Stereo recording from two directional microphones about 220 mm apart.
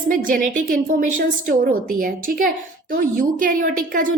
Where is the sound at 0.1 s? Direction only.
40° right (ahead or behind).